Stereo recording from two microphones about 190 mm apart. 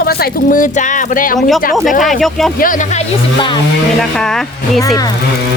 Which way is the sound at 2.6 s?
45° left (ahead or behind).